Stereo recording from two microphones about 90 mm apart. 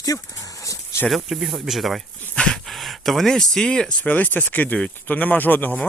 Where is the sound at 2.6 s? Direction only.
Centre (ahead or behind); by 5.8 s 20° left (ahead or behind).